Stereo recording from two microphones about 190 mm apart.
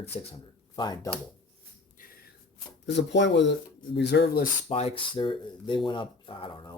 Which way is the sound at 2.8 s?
65° left (ahead or behind).